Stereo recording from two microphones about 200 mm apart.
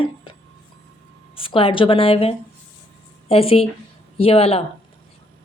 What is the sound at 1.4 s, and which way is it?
Speech, 25° left (ahead or behind).